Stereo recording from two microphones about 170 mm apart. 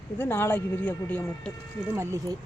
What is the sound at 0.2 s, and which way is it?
Speech, 10° left (ahead or behind).